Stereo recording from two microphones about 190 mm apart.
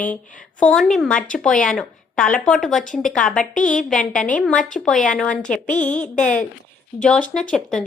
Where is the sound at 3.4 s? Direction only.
45° left (ahead or behind).